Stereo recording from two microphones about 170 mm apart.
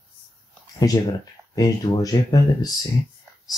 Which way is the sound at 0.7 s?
20° left (ahead or behind).